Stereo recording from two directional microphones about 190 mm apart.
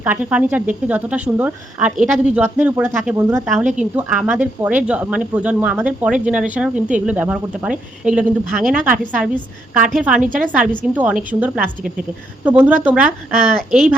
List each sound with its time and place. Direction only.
0.0 s speech: 5° right (ahead or behind)
10.2 s a woman's voice: 45° right (ahead or behind)
10.9 s speech: 10° right (ahead or behind)